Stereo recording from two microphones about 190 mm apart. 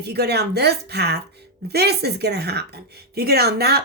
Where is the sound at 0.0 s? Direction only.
60° right (ahead or behind).